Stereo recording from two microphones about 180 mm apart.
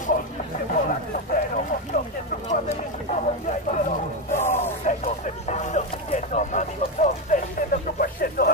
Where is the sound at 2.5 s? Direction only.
45° left (ahead or behind).